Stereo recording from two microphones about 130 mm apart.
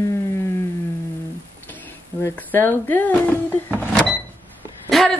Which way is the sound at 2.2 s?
15° left (ahead or behind).